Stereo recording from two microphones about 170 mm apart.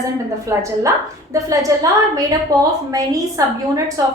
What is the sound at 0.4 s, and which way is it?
A woman's voice, 20° right (ahead or behind).